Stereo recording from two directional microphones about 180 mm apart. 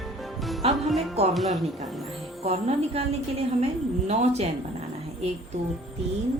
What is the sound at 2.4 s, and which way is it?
A woman's voice, 35° right (ahead or behind).